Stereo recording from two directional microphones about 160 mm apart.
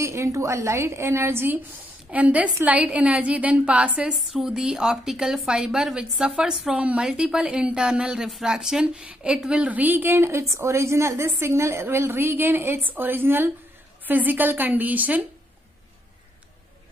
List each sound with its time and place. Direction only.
0.0 s a woman's voice: 20° right (ahead or behind)